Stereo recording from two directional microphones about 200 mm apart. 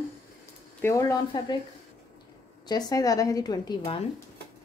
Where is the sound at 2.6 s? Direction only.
20° left (ahead or behind).